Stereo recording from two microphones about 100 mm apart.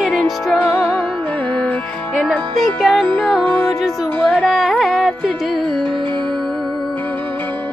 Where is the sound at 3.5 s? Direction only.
15° left (ahead or behind).